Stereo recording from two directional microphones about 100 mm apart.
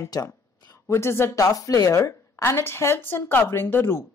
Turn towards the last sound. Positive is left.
turn(degrees=20)  # may be behind; listen again after turning